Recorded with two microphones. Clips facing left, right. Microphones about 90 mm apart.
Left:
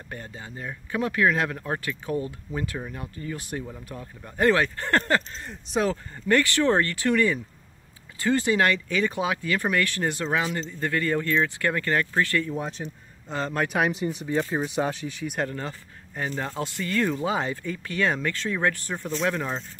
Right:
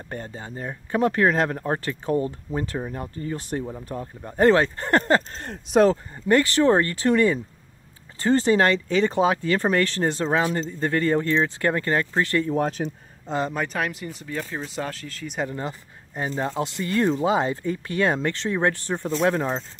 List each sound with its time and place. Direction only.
0.1 s speech: 35° right (ahead or behind)
12.8 s speech: 55° right (ahead or behind)
13.7 s speech: 15° left (ahead or behind)
16.2 s speech: 25° right (ahead or behind)